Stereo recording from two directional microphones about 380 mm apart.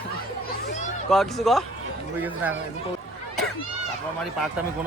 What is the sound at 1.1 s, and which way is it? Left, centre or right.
Speech, centre.